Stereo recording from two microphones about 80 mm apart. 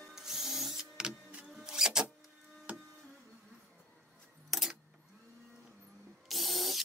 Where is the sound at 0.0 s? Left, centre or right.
Centre.